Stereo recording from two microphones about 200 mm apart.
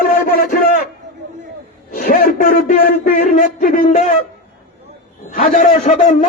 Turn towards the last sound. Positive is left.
turn(degrees=35)  # may be behind; listen again after turning